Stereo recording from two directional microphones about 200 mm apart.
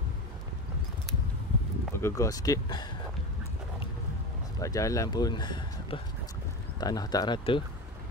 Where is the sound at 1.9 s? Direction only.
15° left (ahead or behind).